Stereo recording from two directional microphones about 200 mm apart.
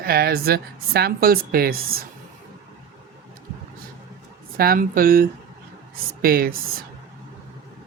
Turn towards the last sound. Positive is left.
turn(degrees=-45)  # may be behind; listen again after turning